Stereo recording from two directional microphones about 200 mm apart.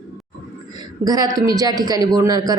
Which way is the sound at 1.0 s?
20° right (ahead or behind).